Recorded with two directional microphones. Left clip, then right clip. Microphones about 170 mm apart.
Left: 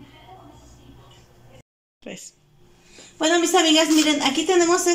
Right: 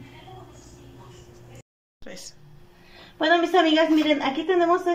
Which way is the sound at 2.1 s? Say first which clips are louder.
Left 4 dB; 15° left (ahead or behind).